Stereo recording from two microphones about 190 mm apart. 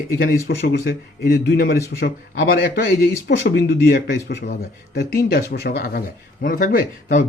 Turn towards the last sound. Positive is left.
turn(degrees=45)  # may be behind; listen again after turning